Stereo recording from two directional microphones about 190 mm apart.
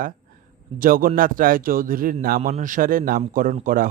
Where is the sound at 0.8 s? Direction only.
45° right (ahead or behind).